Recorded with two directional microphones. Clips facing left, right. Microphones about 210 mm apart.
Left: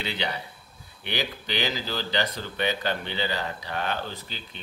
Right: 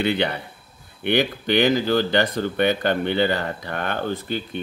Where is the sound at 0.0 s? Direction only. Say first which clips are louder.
Right 9 dB; 55° right (ahead or behind).